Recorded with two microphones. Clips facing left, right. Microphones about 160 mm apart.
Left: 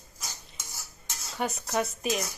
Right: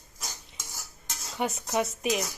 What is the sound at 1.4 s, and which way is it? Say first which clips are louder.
Cutlery: right 1 dB; 20° right (ahead or behind).